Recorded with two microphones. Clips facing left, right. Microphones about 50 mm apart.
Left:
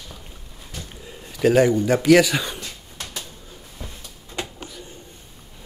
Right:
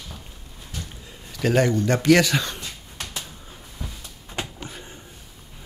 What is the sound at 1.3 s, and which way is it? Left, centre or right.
Speech, centre.